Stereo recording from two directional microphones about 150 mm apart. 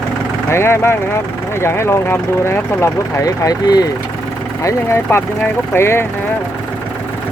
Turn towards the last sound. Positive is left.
turn(degrees=15)  # may be behind; listen again after turning